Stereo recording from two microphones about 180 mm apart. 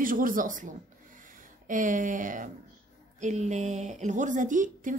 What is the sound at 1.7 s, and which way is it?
A woman's voice, 45° right (ahead or behind).